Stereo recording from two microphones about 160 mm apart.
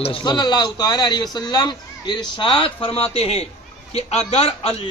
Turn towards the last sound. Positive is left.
turn(degrees=40)  # may be behind; listen again after turning